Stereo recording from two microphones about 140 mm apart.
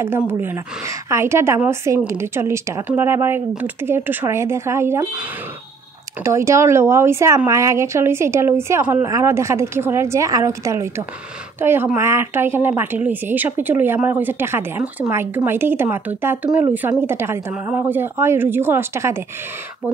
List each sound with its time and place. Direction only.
0.0 s a woman's voice: 15° right (ahead or behind)
6.2 s a woman's voice: 20° right (ahead or behind)